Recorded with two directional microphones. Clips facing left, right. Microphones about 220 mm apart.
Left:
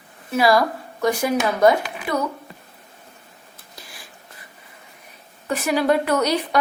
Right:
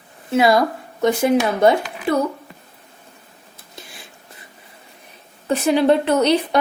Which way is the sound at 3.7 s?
25° right (ahead or behind).